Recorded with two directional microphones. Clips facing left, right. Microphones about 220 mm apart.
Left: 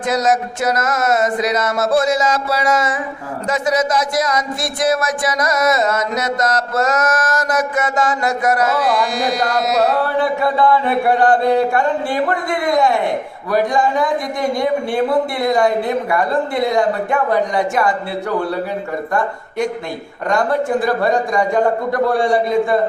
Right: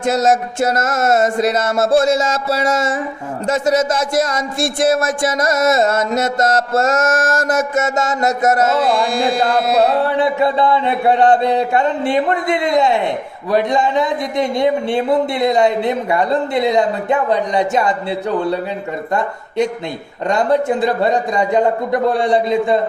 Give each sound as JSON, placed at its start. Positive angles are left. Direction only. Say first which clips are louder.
{"t": 0.0, "sound": "speech", "louder": "right 2 dB", "side_deg": -25}